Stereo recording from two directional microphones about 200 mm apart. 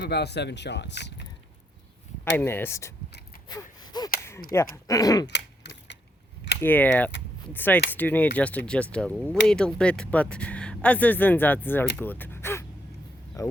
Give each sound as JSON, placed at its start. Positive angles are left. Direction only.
{"t": 0.0, "sound": "speech", "side_deg": 55}
{"t": 2.3, "sound": "speech", "side_deg": 10}
{"t": 3.5, "sound": "gasp", "side_deg": 20}
{"t": 4.5, "sound": "speech", "side_deg": 15}
{"t": 5.3, "sound": "typing", "side_deg": 60}
{"t": 6.6, "sound": "speech", "side_deg": 10}
{"t": 13.4, "sound": "a sound", "side_deg": 15}